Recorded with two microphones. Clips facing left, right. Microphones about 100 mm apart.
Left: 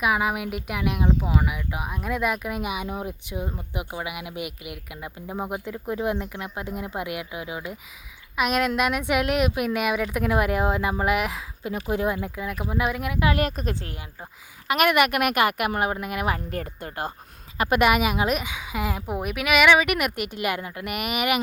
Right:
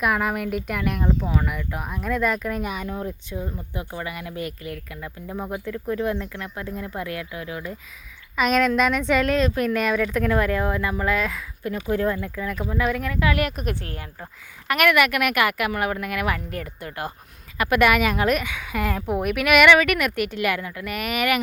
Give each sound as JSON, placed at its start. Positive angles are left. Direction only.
{"t": 0.0, "sound": "speech", "side_deg": 5}
{"t": 13.3, "sound": "speech", "side_deg": 30}
{"t": 19.7, "sound": "speech", "side_deg": 15}